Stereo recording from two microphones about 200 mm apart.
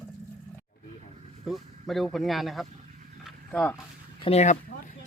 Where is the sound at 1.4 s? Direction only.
Centre (ahead or behind).